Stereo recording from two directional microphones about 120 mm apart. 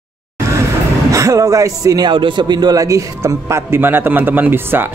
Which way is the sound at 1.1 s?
30° right (ahead or behind).